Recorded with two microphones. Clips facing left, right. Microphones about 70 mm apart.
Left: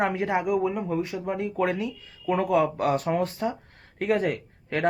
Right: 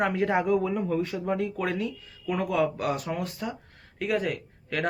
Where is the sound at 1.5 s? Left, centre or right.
Left.